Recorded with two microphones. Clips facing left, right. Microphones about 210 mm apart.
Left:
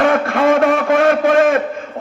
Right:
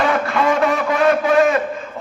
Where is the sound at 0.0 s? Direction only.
55° left (ahead or behind).